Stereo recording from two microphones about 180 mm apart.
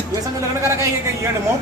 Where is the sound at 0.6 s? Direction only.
15° right (ahead or behind).